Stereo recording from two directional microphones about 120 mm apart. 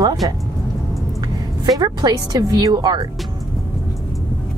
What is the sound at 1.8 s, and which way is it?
Speech, 35° right (ahead or behind).